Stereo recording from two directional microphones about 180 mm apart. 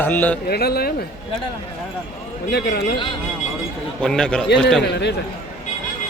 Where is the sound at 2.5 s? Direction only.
65° left (ahead or behind).